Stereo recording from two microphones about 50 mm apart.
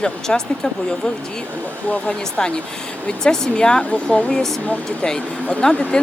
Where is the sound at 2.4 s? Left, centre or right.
Centre.